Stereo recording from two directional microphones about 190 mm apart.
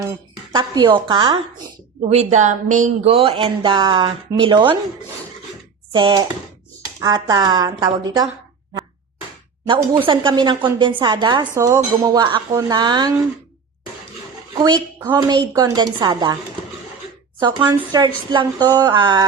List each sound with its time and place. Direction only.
0.5 s speech: 25° right (ahead or behind)
2.0 s speech: 35° right (ahead or behind)
5.9 s speech: 25° right (ahead or behind)
9.6 s speech: 25° right (ahead or behind)
14.6 s speech: 20° right (ahead or behind)
17.6 s speech: 10° right (ahead or behind)
18.3 s speech: 25° right (ahead or behind)